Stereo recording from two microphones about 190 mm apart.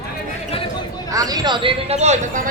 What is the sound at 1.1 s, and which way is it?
Speech, 20° right (ahead or behind).